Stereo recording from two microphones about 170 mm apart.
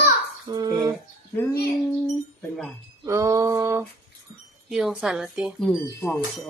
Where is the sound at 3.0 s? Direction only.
15° right (ahead or behind).